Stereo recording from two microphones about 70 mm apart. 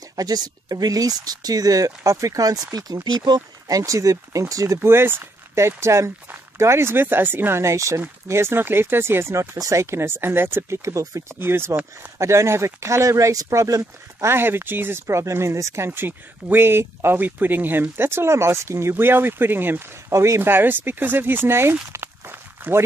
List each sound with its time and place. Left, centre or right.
0.1 s speech: right
2.0 s speech: right
4.8 s speech: right
10.8 s speech: right
11.3 s speech: right
14.3 s speech: right
20.1 s speech: right
20.4 s speech: right
21.9 s walk: right